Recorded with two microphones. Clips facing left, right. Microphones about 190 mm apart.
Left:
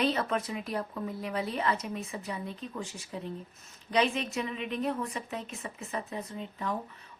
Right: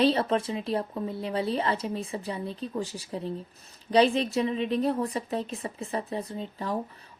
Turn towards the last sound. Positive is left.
turn(degrees=-35)  # may be behind; listen again after turning